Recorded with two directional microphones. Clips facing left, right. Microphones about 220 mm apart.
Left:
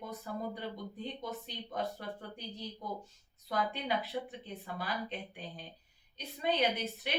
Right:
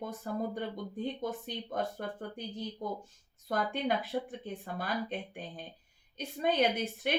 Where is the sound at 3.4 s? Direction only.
50° right (ahead or behind).